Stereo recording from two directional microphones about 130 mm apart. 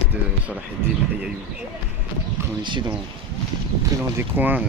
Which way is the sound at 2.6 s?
40° right (ahead or behind).